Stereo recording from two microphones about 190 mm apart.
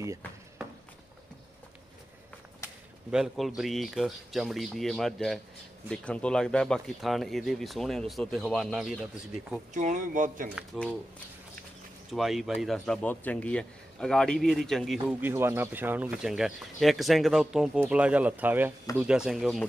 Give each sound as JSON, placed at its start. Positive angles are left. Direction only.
{"t": 3.1, "sound": "speech", "side_deg": 0}
{"t": 9.8, "sound": "speech", "side_deg": -40}
{"t": 10.5, "sound": "speech", "side_deg": 0}
{"t": 12.1, "sound": "speech", "side_deg": 0}
{"t": 15.2, "sound": "speech", "side_deg": -10}